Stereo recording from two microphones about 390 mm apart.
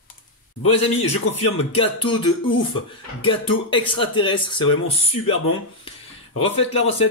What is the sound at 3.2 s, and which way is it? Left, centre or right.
Speech, centre.